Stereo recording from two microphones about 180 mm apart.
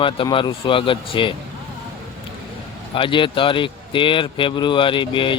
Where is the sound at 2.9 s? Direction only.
30° left (ahead or behind).